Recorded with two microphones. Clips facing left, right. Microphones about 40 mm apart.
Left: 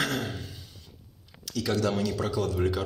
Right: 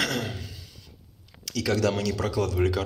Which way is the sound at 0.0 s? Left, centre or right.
Right.